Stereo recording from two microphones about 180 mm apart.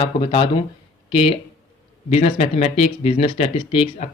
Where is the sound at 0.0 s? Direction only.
30° left (ahead or behind).